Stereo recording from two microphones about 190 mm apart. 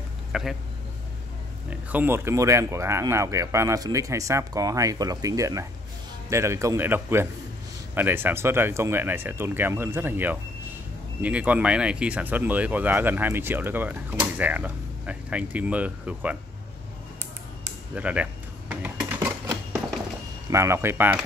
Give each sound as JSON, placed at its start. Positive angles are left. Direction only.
{"t": 0.3, "sound": "speech", "side_deg": 0}
{"t": 1.7, "sound": "speech", "side_deg": -10}
{"t": 17.9, "sound": "a sound", "side_deg": -5}
{"t": 20.4, "sound": "speech", "side_deg": -15}